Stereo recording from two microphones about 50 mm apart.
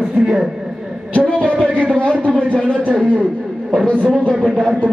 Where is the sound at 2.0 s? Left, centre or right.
Left.